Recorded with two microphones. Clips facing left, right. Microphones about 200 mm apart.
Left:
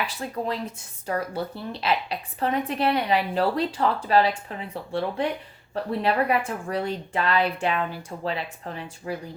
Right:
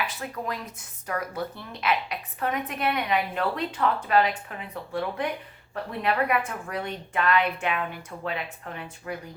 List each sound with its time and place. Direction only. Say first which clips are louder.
0.2 s a woman's voice: left 4 dB; 30° left (ahead or behind)